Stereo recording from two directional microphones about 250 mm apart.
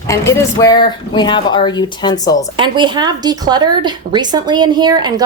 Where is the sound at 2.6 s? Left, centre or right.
Centre.